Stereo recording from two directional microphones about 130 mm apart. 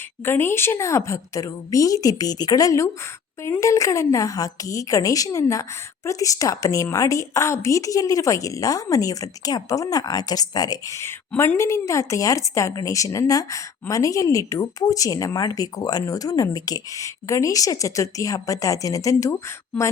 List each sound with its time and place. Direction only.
0.3 s speech: 20° left (ahead or behind)